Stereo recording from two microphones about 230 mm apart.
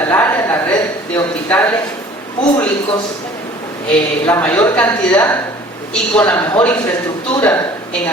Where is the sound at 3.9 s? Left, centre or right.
Centre.